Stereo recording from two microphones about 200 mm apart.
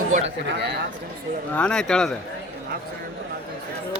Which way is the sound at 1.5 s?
5° left (ahead or behind).